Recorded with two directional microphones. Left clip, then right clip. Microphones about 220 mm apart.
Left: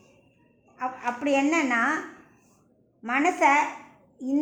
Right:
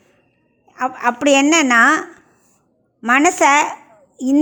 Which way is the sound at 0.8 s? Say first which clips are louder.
Right 11 dB; 50° right (ahead or behind).